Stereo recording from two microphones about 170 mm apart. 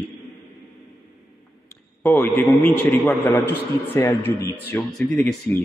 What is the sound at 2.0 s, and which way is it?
A man's voice, 10° left (ahead or behind).